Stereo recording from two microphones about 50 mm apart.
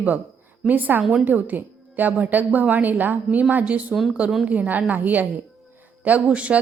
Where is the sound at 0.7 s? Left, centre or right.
Right.